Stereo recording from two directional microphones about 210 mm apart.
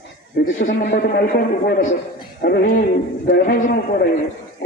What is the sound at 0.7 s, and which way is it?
A man's voice, 55° left (ahead or behind).